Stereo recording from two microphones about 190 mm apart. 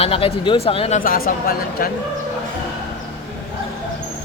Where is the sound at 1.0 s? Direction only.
50° left (ahead or behind).